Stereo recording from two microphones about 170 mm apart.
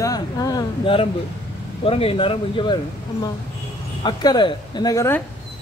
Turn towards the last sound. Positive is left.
turn(degrees=15)  # may be behind; listen again after turning